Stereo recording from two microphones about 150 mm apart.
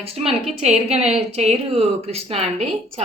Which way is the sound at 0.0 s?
40° right (ahead or behind).